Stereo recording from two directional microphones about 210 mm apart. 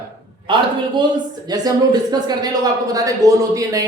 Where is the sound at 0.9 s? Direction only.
20° right (ahead or behind).